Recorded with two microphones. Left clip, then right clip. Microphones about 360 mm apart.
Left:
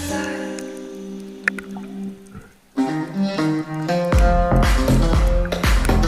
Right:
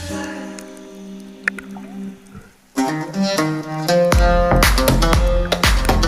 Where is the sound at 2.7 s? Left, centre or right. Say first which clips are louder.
Right 2 dB; right.